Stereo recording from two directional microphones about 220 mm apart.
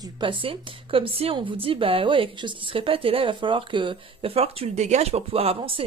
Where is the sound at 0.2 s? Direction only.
25° right (ahead or behind).